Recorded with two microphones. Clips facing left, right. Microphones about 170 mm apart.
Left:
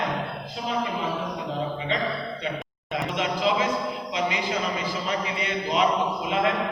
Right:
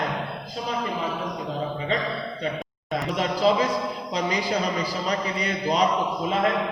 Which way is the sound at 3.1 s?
35° right (ahead or behind).